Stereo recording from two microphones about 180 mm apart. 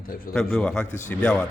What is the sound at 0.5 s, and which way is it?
Speech, 5° left (ahead or behind).